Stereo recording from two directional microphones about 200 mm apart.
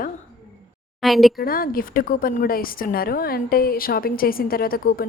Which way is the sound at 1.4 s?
45° left (ahead or behind).